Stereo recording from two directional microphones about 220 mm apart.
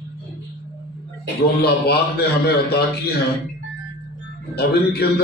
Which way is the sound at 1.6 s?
45° left (ahead or behind).